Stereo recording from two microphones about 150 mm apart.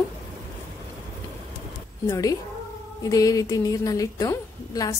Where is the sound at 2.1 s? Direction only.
20° left (ahead or behind).